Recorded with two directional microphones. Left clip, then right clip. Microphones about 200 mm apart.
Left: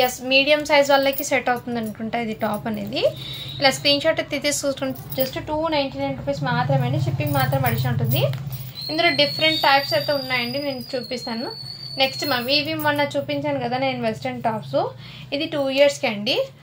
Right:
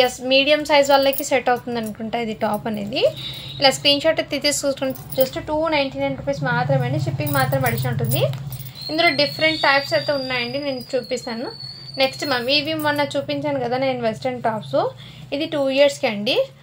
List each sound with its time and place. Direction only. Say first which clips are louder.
0.0 s a woman's voice: right 2 dB; 20° right (ahead or behind)